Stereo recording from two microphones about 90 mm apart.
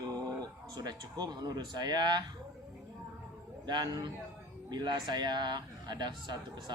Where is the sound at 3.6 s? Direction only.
55° right (ahead or behind).